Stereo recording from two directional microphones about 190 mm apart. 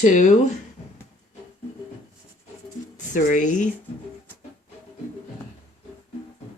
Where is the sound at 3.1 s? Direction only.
40° left (ahead or behind).